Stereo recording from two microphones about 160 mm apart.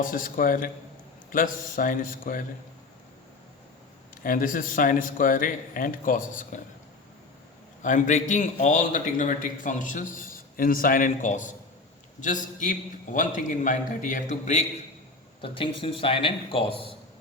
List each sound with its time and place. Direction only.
0.0 s speech: 55° left (ahead or behind)
4.2 s speech: 60° left (ahead or behind)
7.8 s a man's voice: 50° left (ahead or behind)
15.4 s a man's voice: 35° left (ahead or behind)